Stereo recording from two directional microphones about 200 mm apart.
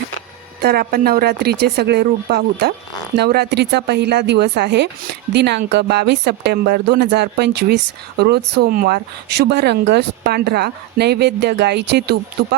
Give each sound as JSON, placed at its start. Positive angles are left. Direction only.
{"t": 0.6, "sound": "a woman's voice", "side_deg": -50}